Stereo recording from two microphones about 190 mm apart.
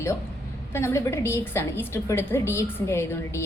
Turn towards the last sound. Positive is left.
turn(degrees=15)  # may be behind; listen again after turning